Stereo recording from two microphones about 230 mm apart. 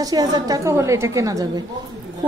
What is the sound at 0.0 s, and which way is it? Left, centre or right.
A woman's voice, centre.